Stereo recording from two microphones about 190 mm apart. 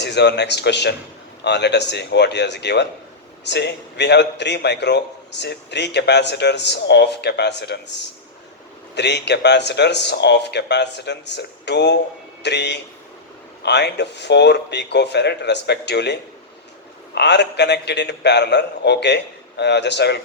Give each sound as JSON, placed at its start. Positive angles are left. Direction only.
{"t": 0.0, "sound": "a man's voice", "side_deg": 65}
{"t": 17.2, "sound": "a man's voice", "side_deg": 65}